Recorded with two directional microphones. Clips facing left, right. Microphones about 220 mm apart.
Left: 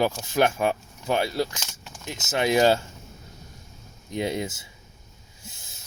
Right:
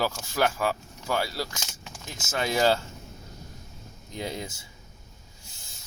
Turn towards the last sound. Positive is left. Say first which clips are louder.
# left 7 dB
turn(degrees=20)  # may be behind; listen again after turning